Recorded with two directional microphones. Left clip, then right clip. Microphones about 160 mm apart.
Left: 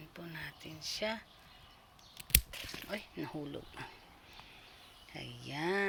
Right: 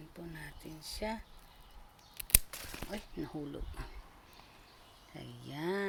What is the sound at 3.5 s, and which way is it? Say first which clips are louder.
Speech: left 2 dB; 20° right (ahead or behind).